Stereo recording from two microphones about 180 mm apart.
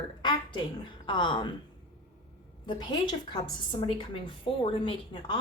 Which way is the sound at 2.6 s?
25° left (ahead or behind).